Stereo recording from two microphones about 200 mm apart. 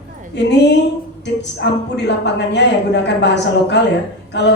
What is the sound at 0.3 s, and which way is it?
A woman's voice, 60° left (ahead or behind).